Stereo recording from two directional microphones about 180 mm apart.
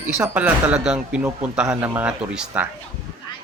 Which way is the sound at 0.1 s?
10° right (ahead or behind).